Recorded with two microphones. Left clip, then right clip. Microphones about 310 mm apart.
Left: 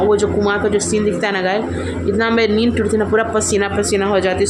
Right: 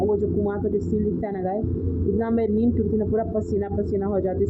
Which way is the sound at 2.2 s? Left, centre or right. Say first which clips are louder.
Left 10 dB; centre.